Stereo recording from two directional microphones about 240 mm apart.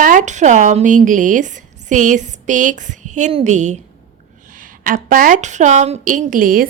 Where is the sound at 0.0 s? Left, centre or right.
Right.